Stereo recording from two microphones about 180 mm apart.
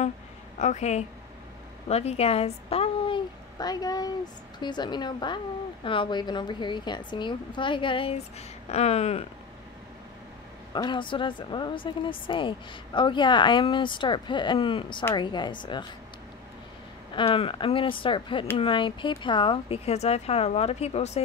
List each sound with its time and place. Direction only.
0.6 s a woman's voice: 40° left (ahead or behind)
3.5 s speech: 20° left (ahead or behind)
10.7 s speech: 25° left (ahead or behind)
17.1 s speech: 30° left (ahead or behind)